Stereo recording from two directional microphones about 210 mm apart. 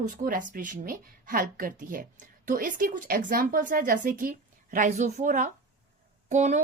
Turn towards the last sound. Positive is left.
turn(degrees=-35)  # may be behind; listen again after turning